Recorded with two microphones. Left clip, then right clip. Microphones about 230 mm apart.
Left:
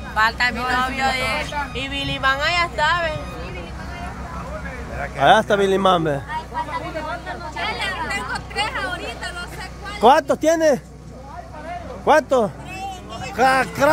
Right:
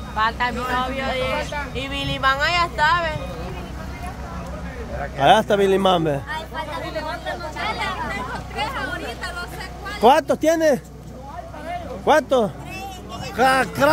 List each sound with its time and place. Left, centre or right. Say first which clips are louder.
0.1 s speech: left 3 dB; left
1.8 s speech: right 1 dB; centre
5.2 s a man's voice: left 1 dB; centre
8.1 s hubbub: left 3 dB; left
9.8 s speech: left 1 dB; centre
12.1 s a man's voice: left 1 dB; centre